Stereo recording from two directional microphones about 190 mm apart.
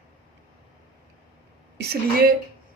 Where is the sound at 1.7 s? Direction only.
55° right (ahead or behind).